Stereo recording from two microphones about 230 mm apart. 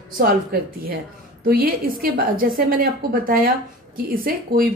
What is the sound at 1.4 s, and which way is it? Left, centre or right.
A woman's voice, right.